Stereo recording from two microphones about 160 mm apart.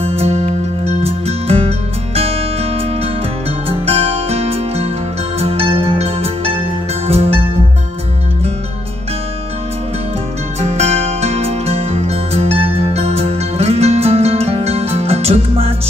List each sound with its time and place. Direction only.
0.0 s music: 40° right (ahead or behind)
3.6 s music: 35° right (ahead or behind)
10.6 s music: 40° right (ahead or behind)